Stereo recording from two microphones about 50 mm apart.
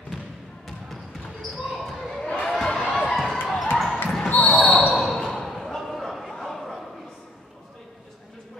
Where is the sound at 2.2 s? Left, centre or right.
Centre.